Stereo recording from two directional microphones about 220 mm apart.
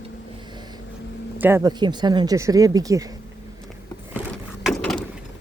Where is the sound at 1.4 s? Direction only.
10° right (ahead or behind).